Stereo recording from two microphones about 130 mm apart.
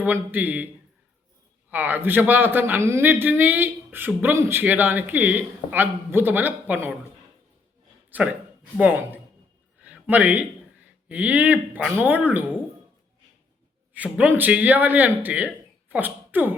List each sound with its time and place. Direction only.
0.0 s a man's voice: 15° right (ahead or behind)
1.7 s a man's voice: 15° right (ahead or behind)
8.1 s a man's voice: 10° right (ahead or behind)
9.8 s a sound: 10° right (ahead or behind)
11.1 s a man's voice: 10° right (ahead or behind)
13.9 s speech: 10° right (ahead or behind)